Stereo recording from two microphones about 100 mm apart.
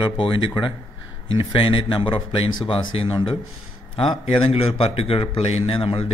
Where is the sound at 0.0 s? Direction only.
55° left (ahead or behind).